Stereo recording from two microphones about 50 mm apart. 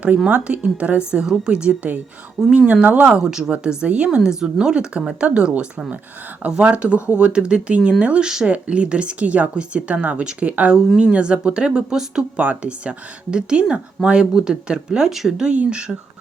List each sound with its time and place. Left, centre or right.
0.3 s speech: right
3.1 s speech: centre
4.2 s speech: centre
12.4 s speech: right
15.1 s speech: centre
15.4 s speech: centre